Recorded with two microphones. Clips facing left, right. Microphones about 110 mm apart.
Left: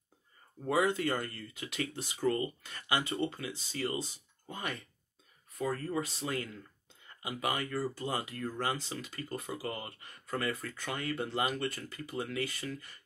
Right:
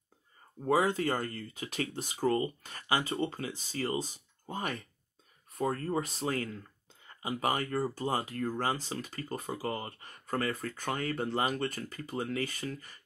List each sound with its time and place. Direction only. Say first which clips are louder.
0.7 s speech: right 2 dB; 35° right (ahead or behind)